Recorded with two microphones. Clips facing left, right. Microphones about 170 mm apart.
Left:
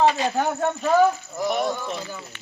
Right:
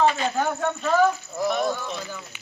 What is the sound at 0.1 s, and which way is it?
Speech, 35° left (ahead or behind).